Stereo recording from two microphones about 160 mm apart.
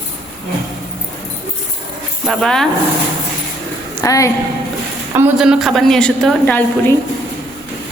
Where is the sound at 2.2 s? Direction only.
5° left (ahead or behind).